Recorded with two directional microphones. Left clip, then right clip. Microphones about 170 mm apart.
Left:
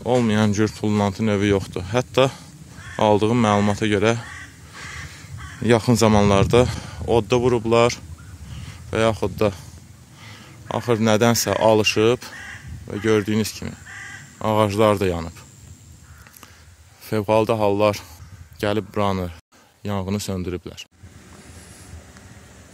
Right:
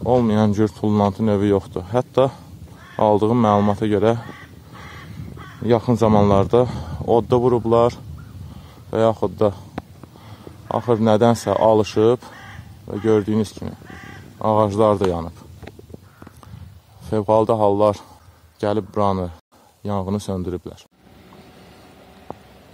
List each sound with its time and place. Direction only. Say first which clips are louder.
0.0 s speech: right 2 dB; 20° left (ahead or behind)
5.6 s speech: even; 40° left (ahead or behind)
6.0 s speech: right 2 dB; 25° left (ahead or behind)
6.8 s speech: right 2 dB; 10° left (ahead or behind)
10.9 s speech: right 2 dB; 20° left (ahead or behind)
17.0 s speech: right 2 dB; 20° left (ahead or behind)